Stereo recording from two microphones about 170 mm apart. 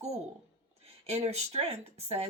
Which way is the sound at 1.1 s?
40° right (ahead or behind).